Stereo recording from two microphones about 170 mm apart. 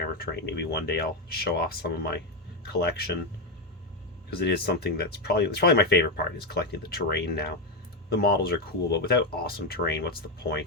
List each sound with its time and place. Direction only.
0.3 s speech: 75° left (ahead or behind)
4.3 s speech: 75° left (ahead or behind)